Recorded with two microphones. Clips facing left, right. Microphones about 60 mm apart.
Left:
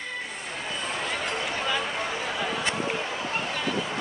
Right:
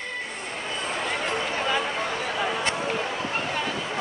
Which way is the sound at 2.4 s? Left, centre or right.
Centre.